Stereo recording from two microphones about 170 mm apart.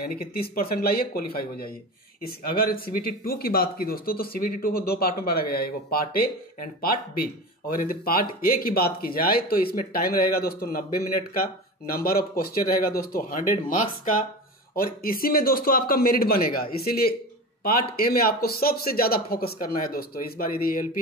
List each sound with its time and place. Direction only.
0.0 s speech: 60° left (ahead or behind)